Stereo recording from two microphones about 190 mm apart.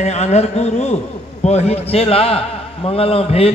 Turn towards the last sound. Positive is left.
turn(degrees=30)  # may be behind; listen again after turning